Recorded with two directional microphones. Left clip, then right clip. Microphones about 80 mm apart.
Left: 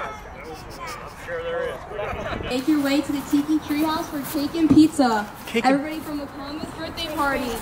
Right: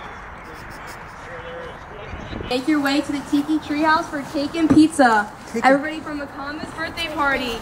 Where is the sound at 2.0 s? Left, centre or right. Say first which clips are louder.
Left 6 dB; left.